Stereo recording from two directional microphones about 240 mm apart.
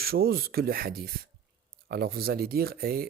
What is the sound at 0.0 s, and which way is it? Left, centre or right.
Speech, right.